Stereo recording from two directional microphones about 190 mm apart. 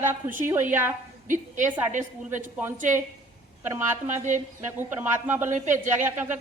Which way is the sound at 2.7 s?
40° right (ahead or behind).